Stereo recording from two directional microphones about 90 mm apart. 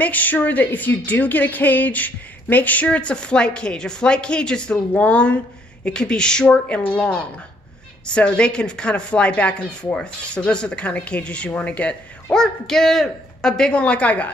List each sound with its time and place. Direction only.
0.0 s a woman's voice: 20° left (ahead or behind)